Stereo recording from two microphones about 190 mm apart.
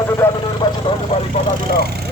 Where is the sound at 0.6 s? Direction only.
30° left (ahead or behind).